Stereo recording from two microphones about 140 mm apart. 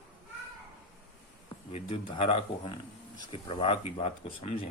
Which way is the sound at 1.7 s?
50° left (ahead or behind).